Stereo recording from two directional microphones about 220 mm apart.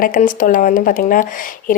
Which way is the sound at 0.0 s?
35° left (ahead or behind).